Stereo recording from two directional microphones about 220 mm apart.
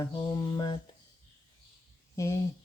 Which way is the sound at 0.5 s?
20° left (ahead or behind).